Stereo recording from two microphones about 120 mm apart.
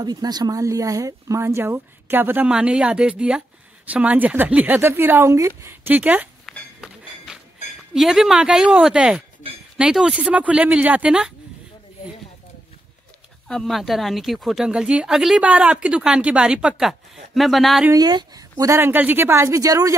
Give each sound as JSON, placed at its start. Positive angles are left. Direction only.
{"t": 0.0, "sound": "speech", "side_deg": -35}
{"t": 7.3, "sound": "a sound", "side_deg": -10}
{"t": 7.9, "sound": "a woman's voice", "side_deg": -5}
{"t": 13.5, "sound": "a woman's voice", "side_deg": 5}
{"t": 17.9, "sound": "speech", "side_deg": -35}
{"t": 18.6, "sound": "speech", "side_deg": -20}